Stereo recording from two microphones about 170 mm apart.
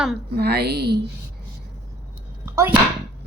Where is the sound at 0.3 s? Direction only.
70° right (ahead or behind).